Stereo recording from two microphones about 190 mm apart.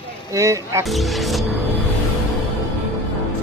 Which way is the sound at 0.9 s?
Centre (ahead or behind).